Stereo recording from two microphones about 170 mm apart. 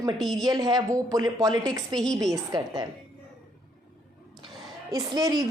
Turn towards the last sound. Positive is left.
turn(degrees=-20)  # may be behind; listen again after turning